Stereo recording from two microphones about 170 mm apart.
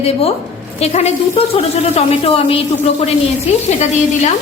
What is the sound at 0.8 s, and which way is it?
A woman's voice, 40° left (ahead or behind).